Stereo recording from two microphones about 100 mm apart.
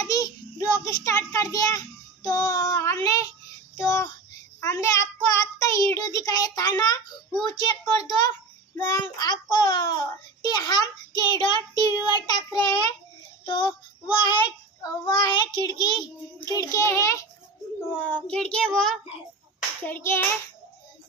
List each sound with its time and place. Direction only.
0.1 s child singing: 35° left (ahead or behind)
7.4 s a sound: 45° left (ahead or behind)
8.3 s child singing: 20° left (ahead or behind)
9.0 s child singing: 45° left (ahead or behind)
13.5 s child singing: 50° left (ahead or behind); by 17.3 s 30° left (ahead or behind)
17.9 s child singing: 15° left (ahead or behind)
19.9 s hands: 25° left (ahead or behind)